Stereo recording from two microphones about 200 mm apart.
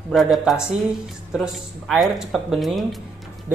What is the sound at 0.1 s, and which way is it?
A man's voice, centre (ahead or behind).